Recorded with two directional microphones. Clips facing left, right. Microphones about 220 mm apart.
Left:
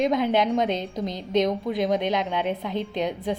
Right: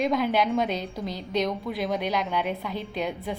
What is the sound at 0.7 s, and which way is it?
Speech, 20° left (ahead or behind).